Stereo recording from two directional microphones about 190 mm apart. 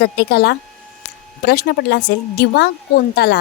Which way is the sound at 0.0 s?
60° left (ahead or behind).